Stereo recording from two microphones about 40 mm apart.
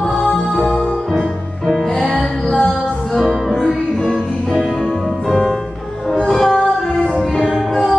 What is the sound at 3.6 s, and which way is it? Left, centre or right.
Music, centre.